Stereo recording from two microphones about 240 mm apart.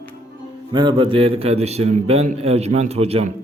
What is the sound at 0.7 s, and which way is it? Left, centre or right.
Speech, centre.